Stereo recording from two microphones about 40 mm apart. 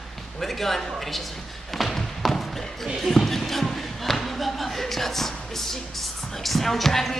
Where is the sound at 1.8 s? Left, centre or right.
Centre.